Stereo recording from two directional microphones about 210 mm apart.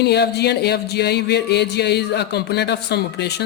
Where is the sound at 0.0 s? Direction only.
50° left (ahead or behind).